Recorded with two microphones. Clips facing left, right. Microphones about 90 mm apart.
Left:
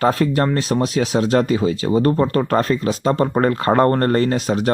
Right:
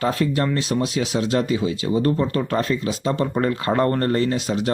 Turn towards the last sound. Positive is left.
turn(degrees=45)  # may be behind; listen again after turning